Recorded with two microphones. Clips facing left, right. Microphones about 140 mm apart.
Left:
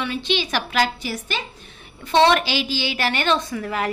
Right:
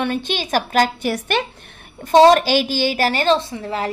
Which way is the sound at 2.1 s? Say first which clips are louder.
Right 6 dB; 40° right (ahead or behind).